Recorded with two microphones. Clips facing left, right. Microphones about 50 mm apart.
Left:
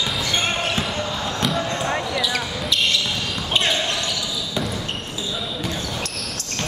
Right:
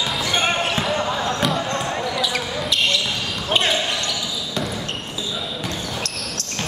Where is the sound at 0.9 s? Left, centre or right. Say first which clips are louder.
Right 4 dB; centre.